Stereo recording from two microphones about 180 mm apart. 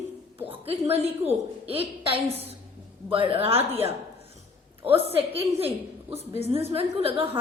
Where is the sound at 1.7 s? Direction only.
30° right (ahead or behind).